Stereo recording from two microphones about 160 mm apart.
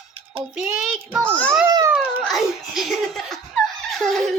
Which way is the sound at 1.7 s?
25° right (ahead or behind).